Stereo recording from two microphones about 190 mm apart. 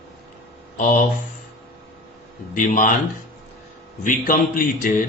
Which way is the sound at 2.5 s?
45° left (ahead or behind).